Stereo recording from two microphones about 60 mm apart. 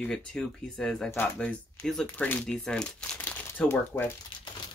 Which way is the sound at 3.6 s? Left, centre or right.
Left.